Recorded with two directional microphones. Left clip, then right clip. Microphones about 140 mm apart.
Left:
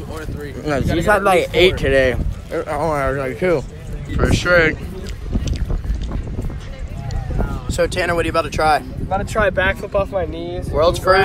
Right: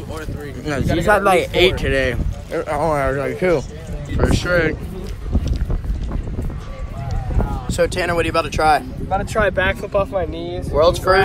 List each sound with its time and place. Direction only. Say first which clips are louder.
0.7 s speech: left 3 dB; 40° left (ahead or behind)
1.1 s speech: even; 10° left (ahead or behind)
1.4 s speech: left 1 dB; 30° left (ahead or behind)
2.5 s speech: right 1 dB; 5° left (ahead or behind)
7.3 s a sound: even; centre (ahead or behind)
7.9 s speech: even; 10° right (ahead or behind)
9.1 s speech: even; 5° left (ahead or behind)
10.7 s speech: even; 15° right (ahead or behind)